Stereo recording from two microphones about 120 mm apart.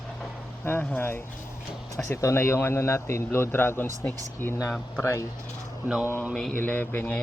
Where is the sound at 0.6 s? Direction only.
15° left (ahead or behind).